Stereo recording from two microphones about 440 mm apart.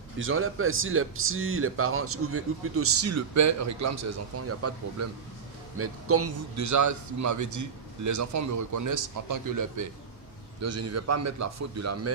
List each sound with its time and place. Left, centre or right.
0.2 s a man's voice: right